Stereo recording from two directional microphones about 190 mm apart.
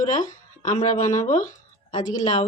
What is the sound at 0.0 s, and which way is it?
Speech, 45° left (ahead or behind).